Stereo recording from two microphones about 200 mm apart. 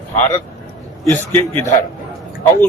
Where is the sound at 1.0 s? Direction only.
10° left (ahead or behind).